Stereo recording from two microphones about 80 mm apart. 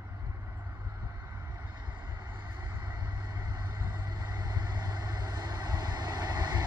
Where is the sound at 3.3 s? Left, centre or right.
Right.